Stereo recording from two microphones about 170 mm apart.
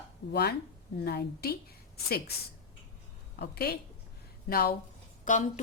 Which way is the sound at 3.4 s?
70° left (ahead or behind).